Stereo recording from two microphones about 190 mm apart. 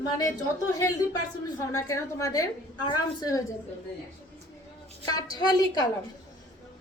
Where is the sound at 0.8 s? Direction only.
15° left (ahead or behind).